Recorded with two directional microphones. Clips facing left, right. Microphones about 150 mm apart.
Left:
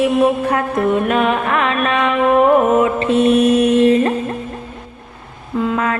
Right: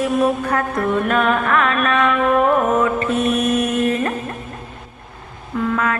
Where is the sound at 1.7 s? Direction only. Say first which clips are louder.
Left 1 dB; 30° left (ahead or behind).